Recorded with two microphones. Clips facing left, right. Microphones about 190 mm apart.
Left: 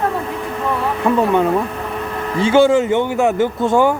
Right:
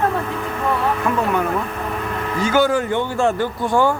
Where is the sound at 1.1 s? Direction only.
35° left (ahead or behind).